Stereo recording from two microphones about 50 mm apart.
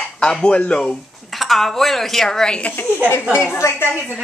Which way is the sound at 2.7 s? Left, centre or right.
Left.